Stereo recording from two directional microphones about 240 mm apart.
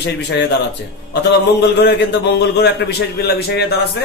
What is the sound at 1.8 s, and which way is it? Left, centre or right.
A man's voice, left.